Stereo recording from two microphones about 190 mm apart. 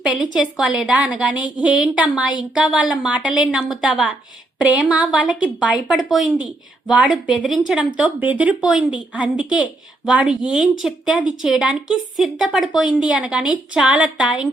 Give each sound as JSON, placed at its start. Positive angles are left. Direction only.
{"t": 0.3, "sound": "a woman's voice", "side_deg": -5}